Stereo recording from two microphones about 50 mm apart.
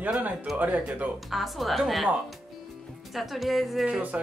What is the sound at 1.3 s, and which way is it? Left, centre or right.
Speech, centre.